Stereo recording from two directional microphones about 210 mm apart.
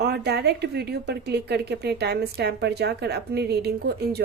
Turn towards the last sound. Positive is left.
turn(degrees=-50)  # may be behind; listen again after turning